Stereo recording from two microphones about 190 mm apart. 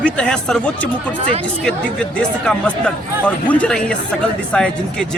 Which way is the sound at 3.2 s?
5° left (ahead or behind).